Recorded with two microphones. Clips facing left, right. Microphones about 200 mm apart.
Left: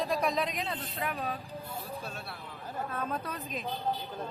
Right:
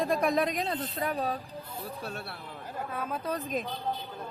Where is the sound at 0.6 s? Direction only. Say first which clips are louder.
Right 4 dB; 35° right (ahead or behind).